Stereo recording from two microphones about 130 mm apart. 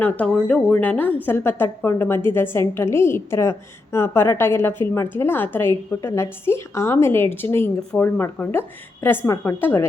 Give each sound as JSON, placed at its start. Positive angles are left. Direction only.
{"t": 0.0, "sound": "a woman's voice", "side_deg": 10}